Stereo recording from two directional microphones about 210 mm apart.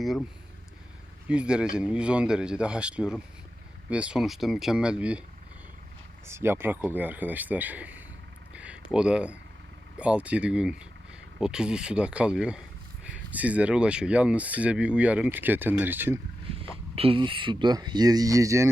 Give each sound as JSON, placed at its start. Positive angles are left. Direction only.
{"t": 0.0, "sound": "speech", "side_deg": 0}
{"t": 1.3, "sound": "speech", "side_deg": -5}
{"t": 6.2, "sound": "speech", "side_deg": -10}
{"t": 16.9, "sound": "speech", "side_deg": -25}